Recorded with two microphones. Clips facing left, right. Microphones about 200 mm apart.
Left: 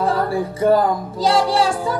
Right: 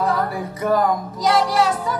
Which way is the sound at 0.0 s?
30° left (ahead or behind).